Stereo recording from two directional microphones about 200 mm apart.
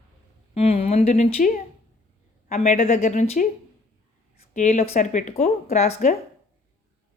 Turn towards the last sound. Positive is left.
turn(degrees=35)  # may be behind; listen again after turning